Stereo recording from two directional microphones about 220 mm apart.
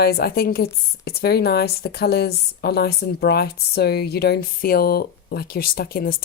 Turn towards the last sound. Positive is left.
turn(degrees=45)  # may be behind; listen again after turning